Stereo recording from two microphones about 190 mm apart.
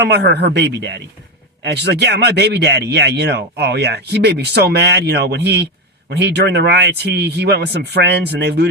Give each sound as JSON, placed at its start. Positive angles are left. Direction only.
{"t": 0.0, "sound": "speech", "side_deg": -60}